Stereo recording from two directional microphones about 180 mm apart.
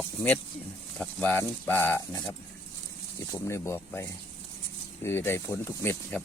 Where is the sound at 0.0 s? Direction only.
10° left (ahead or behind).